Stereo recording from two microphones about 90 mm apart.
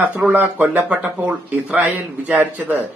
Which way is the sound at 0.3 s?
20° right (ahead or behind).